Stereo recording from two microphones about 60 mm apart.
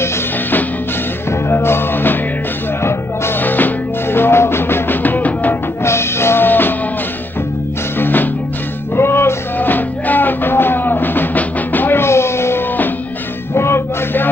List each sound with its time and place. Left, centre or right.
1.3 s music: left
3.3 s music: left
5.9 s music: left
8.0 s music: left